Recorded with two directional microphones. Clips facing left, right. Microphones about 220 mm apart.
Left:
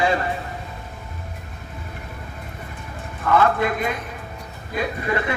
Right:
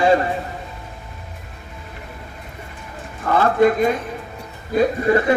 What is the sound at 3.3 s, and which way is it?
Speech, 35° right (ahead or behind).